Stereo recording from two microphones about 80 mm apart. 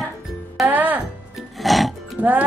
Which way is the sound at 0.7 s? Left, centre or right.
Right.